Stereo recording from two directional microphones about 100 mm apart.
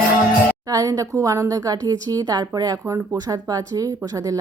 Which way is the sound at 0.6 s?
35° right (ahead or behind).